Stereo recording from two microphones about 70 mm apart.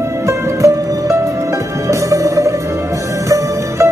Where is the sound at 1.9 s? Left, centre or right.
Right.